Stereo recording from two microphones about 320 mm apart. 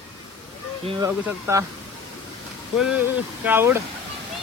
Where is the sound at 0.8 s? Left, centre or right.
Centre.